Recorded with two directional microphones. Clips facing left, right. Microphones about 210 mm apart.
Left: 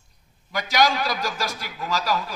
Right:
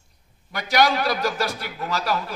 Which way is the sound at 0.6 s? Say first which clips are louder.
Right 1 dB; 60° right (ahead or behind).